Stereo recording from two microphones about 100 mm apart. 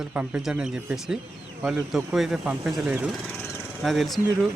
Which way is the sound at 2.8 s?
15° right (ahead or behind).